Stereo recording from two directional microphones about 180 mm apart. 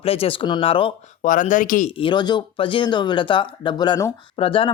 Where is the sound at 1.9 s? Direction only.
30° left (ahead or behind).